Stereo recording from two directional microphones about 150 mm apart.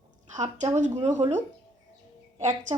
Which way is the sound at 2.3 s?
50° right (ahead or behind).